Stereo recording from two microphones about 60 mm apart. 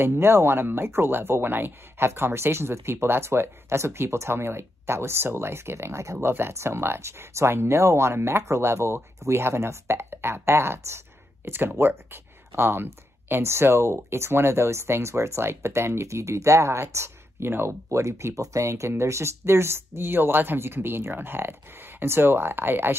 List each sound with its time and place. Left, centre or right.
0.0 s speech: right
17.8 s speech: right